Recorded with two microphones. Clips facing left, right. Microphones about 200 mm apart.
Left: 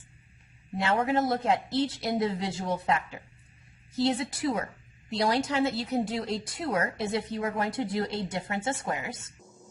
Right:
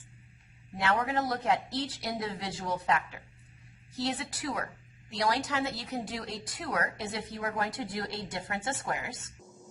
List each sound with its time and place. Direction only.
0.8 s a woman's voice: 25° left (ahead or behind)